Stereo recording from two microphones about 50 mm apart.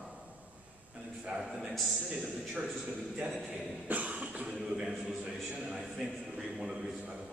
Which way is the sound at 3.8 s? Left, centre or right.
Right.